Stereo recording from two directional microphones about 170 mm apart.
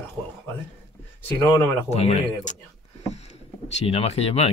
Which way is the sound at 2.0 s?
35° left (ahead or behind).